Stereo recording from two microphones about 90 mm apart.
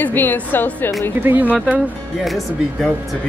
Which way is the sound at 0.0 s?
20° left (ahead or behind).